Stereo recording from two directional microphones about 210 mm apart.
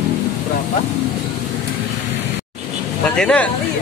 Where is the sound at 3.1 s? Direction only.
5° left (ahead or behind).